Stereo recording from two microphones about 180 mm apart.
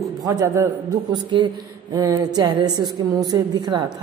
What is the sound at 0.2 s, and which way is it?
A man's voice, 20° right (ahead or behind).